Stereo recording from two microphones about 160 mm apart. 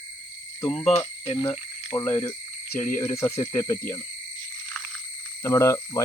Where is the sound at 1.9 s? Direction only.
20° left (ahead or behind).